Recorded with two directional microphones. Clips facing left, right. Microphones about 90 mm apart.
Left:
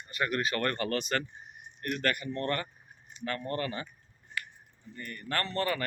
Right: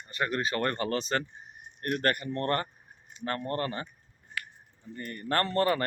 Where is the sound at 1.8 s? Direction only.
45° right (ahead or behind).